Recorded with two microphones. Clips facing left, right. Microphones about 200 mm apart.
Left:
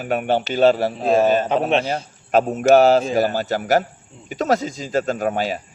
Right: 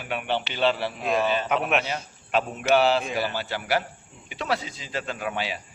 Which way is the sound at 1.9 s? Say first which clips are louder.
Left 8 dB; 45° left (ahead or behind).